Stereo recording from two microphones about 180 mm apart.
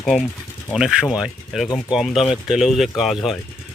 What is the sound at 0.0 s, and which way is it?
Speech, centre (ahead or behind).